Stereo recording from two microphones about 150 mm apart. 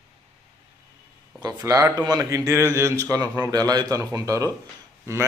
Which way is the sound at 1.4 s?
25° right (ahead or behind).